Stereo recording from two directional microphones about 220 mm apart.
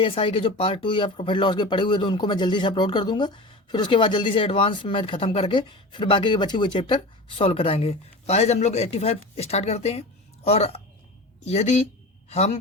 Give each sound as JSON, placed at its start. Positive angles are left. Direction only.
{"t": 0.0, "sound": "speech", "side_deg": 25}